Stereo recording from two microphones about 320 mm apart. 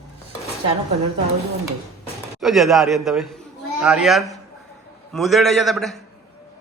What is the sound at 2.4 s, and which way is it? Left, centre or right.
A man's voice, centre.